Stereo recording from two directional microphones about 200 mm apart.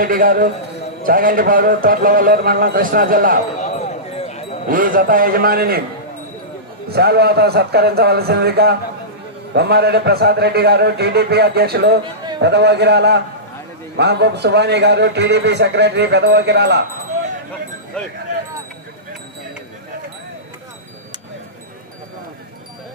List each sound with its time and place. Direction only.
0.0 s a man's voice: 45° right (ahead or behind)
3.6 s a sound: 35° left (ahead or behind)
4.7 s a man's voice: 45° right (ahead or behind)
6.9 s a man's voice: 55° right (ahead or behind)
18.0 s speech: 5° left (ahead or behind)